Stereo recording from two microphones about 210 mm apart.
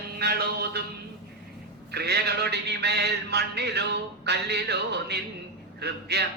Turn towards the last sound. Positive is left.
turn(degrees=-50)  # may be behind; listen again after turning